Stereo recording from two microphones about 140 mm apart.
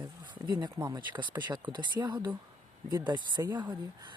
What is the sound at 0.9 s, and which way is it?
Speech, 35° right (ahead or behind).